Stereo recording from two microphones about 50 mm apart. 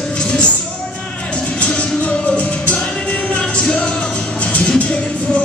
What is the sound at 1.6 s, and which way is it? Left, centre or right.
Music, left.